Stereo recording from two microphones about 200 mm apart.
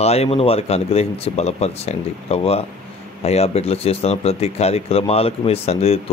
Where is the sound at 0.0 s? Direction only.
30° left (ahead or behind).